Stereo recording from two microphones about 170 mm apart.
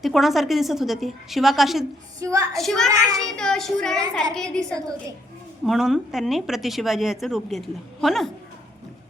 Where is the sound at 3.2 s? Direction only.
5° left (ahead or behind).